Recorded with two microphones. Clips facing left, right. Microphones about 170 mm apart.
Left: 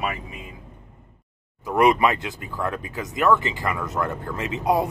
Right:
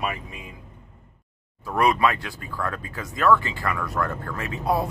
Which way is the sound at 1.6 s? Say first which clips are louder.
Left 3 dB; 20° left (ahead or behind).